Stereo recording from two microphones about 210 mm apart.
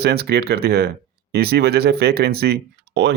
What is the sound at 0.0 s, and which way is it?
Speech, 50° right (ahead or behind).